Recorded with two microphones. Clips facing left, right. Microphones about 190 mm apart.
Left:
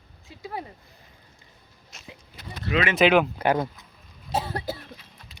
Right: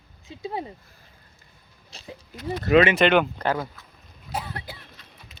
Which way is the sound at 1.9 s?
30° right (ahead or behind).